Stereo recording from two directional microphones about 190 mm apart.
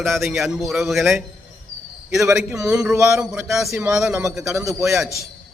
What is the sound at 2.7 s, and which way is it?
A man's voice, 5° right (ahead or behind).